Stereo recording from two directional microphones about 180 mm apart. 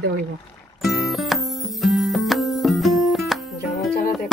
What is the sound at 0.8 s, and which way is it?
Music, centre (ahead or behind).